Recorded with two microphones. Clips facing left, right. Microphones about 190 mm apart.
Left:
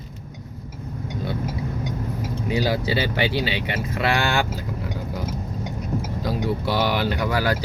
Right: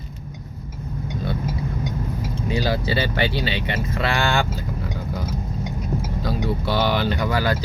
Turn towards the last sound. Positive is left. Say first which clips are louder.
# right 1 dB
turn(degrees=10)  # may be behind; listen again after turning